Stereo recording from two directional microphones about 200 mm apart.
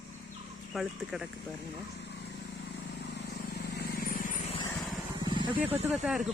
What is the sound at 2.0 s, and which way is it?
Vehicle, 60° left (ahead or behind).